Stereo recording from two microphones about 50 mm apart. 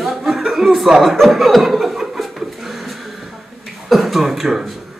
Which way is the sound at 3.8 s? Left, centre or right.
Centre.